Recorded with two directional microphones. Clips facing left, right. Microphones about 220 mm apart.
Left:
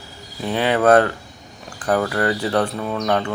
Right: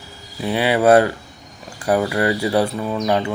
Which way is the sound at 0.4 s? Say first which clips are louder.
Right 1 dB; 10° right (ahead or behind).